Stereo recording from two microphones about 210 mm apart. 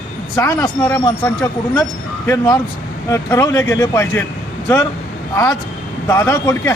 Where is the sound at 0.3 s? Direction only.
15° left (ahead or behind).